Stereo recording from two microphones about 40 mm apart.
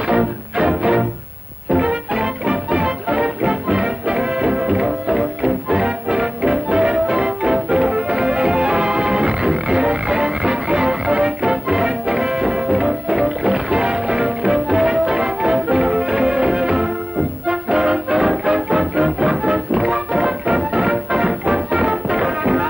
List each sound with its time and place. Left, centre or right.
0.0 s music: right
0.6 s music: centre